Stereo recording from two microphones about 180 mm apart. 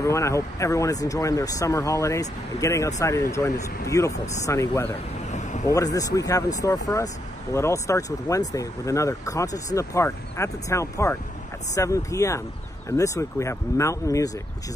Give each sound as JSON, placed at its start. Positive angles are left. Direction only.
{"t": 0.0, "sound": "speech", "side_deg": 15}
{"t": 5.3, "sound": "vehicle", "side_deg": 40}
{"t": 5.7, "sound": "speech", "side_deg": 20}